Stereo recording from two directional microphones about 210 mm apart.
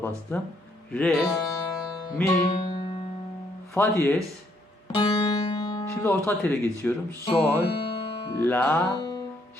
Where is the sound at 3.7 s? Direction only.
10° left (ahead or behind).